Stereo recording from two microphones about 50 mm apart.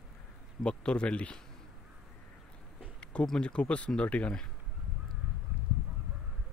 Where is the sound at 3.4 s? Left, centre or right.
Left.